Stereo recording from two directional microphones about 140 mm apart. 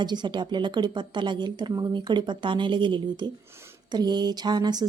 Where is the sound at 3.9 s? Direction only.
30° right (ahead or behind).